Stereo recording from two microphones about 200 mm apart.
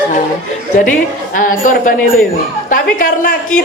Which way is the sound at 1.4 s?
40° left (ahead or behind).